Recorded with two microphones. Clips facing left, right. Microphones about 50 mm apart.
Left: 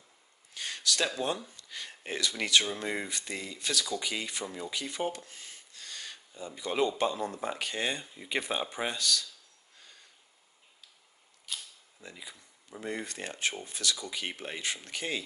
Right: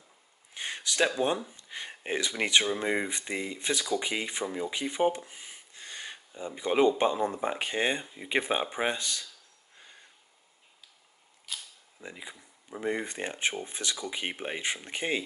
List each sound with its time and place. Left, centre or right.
0.6 s speech: right
9.8 s a sound: right
11.5 s camera: centre
12.0 s speech: right